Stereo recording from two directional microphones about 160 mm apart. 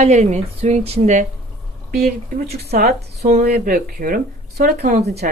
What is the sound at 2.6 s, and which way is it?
Speech, 85° right.